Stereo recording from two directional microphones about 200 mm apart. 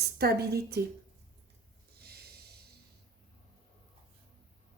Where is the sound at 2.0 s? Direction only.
50° right (ahead or behind).